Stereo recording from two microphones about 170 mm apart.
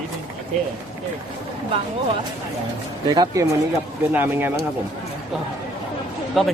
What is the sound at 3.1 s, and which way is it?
Speech, 25° right (ahead or behind).